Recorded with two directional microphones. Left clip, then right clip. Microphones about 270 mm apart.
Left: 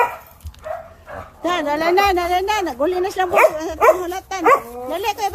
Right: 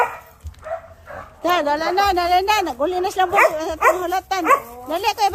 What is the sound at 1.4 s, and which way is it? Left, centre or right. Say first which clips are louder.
Speech: right 1 dB; centre.